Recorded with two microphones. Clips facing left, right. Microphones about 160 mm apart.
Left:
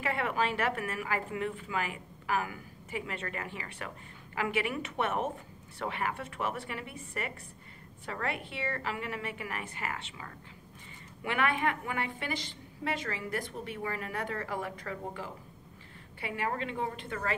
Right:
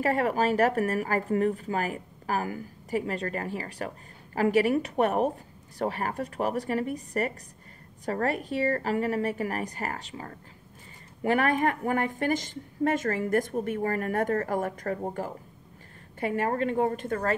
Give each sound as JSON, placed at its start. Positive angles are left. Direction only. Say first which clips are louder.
{"t": 0.0, "sound": "a woman's voice", "louder": "right 7 dB", "side_deg": -40}